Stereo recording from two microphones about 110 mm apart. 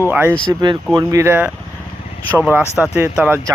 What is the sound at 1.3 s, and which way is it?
Speech, 15° right (ahead or behind).